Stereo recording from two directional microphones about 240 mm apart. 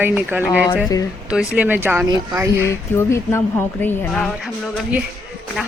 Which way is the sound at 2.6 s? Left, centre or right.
Centre.